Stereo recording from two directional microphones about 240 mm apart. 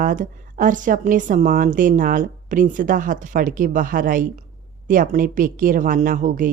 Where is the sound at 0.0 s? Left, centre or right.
Right.